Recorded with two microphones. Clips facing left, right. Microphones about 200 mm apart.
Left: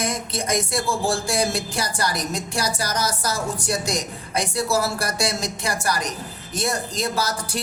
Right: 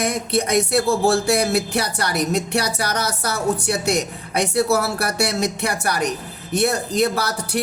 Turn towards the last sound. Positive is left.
turn(degrees=-65)  # may be behind; listen again after turning